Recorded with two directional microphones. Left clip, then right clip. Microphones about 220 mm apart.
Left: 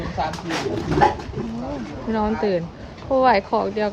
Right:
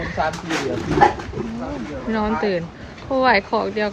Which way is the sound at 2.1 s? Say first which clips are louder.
Even; 5° left (ahead or behind).